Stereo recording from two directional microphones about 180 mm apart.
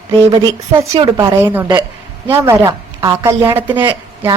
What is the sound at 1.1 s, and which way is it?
A woman's voice, 15° right (ahead or behind).